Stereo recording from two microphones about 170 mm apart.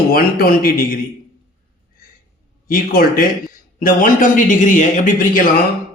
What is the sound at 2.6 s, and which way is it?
A man's voice, 55° left (ahead or behind).